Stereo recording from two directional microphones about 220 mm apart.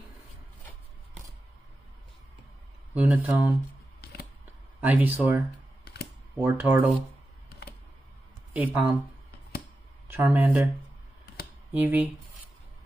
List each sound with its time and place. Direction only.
2.9 s speech: 5° right (ahead or behind)
4.0 s a sound: 45° left (ahead or behind)
4.7 s speech: 5° right (ahead or behind)
5.9 s camera: 50° left (ahead or behind)
6.3 s speech: 10° right (ahead or behind)
8.5 s speech: 10° right (ahead or behind)
10.1 s speech: 10° right (ahead or behind)
11.7 s speech: 10° right (ahead or behind)